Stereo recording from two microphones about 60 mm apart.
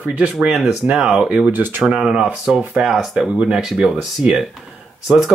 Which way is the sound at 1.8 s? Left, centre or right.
Centre.